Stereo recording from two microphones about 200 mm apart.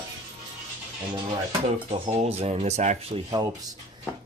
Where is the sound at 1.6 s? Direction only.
30° right (ahead or behind).